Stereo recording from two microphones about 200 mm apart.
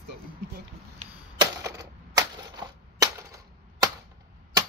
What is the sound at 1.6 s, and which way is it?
Typewriter, 15° right (ahead or behind).